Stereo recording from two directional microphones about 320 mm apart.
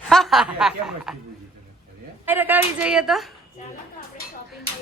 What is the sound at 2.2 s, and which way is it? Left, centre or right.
A woman's voice, centre.